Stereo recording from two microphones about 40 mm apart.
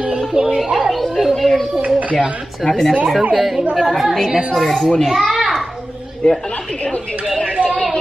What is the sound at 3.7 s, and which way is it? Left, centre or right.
Speech, centre.